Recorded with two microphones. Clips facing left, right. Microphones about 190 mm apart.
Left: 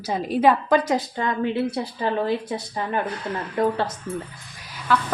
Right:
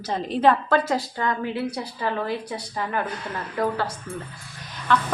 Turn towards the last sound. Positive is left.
turn(degrees=5)  # may be behind; listen again after turning